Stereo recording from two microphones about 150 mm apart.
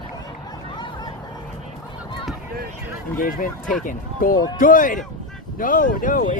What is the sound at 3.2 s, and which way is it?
Speech, 65° left (ahead or behind).